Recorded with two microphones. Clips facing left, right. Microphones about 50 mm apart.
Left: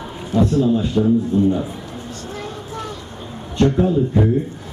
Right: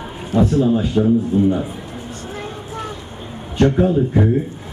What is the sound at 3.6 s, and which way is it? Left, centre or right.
Speech, right.